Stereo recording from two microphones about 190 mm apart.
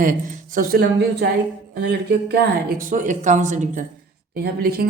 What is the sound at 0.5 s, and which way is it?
Speech, 55° right (ahead or behind).